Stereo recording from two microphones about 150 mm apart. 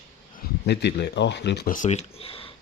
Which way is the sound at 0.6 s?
90° left.